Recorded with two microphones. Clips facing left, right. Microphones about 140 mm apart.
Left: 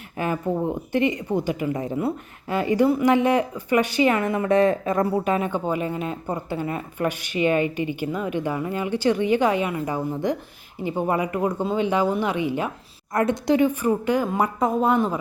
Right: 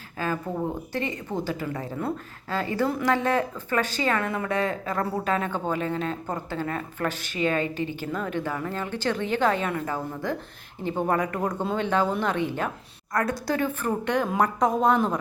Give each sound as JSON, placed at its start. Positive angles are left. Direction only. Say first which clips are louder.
{"t": 0.2, "sound": "speech", "louder": "left 4 dB", "side_deg": 20}
{"t": 13.1, "sound": "speech", "louder": "left 6 dB", "side_deg": 20}